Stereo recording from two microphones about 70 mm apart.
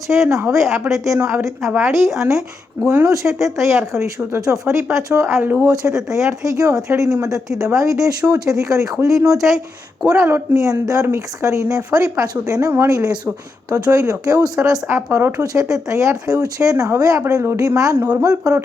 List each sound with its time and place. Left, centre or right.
0.1 s speech: right
5.6 s speech: right
14.8 s speech: right
15.3 s speech: right